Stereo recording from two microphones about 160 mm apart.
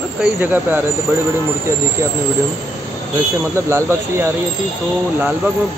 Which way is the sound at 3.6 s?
15° right (ahead or behind).